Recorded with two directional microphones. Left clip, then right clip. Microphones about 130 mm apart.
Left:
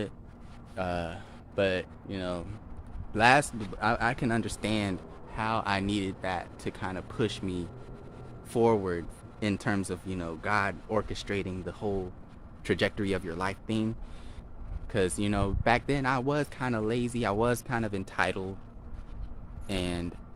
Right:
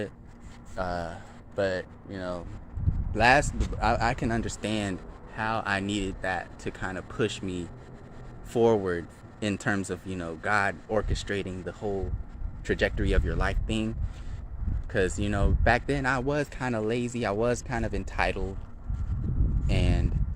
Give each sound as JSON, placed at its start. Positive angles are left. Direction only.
{"t": 0.9, "sound": "speech", "side_deg": 40}
{"t": 3.1, "sound": "speech", "side_deg": 15}
{"t": 3.8, "sound": "speech", "side_deg": 0}
{"t": 5.3, "sound": "speech", "side_deg": 15}
{"t": 13.1, "sound": "speech", "side_deg": 0}
{"t": 14.9, "sound": "speech", "side_deg": 15}
{"t": 19.6, "sound": "vehicle", "side_deg": 5}